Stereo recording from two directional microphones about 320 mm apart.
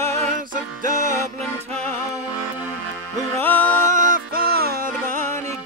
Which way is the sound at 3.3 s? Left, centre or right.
Centre.